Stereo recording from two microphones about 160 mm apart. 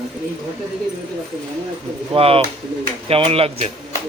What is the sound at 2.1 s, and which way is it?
A man's voice, 35° right (ahead or behind).